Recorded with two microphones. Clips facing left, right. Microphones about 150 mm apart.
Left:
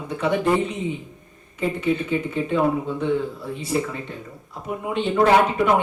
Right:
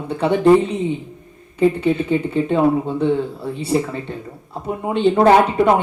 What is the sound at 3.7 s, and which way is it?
Speech, 30° right (ahead or behind).